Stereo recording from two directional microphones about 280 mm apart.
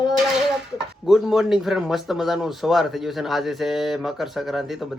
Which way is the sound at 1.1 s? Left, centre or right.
Centre.